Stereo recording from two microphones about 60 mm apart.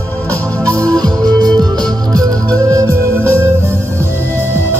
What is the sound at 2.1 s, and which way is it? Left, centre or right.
Music, right.